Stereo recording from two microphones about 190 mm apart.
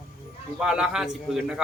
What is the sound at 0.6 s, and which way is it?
A man's voice, 5° right (ahead or behind).